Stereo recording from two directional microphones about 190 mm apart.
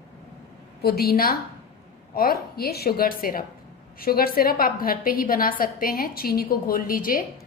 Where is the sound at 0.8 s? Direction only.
55° left (ahead or behind).